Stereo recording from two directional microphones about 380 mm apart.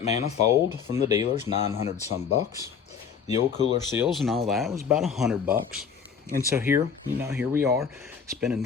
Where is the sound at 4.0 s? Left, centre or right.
Centre.